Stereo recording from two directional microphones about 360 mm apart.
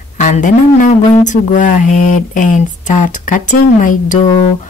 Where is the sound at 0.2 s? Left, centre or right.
Left.